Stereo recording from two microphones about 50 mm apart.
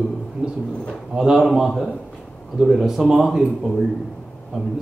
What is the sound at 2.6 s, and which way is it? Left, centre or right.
A man's voice, centre.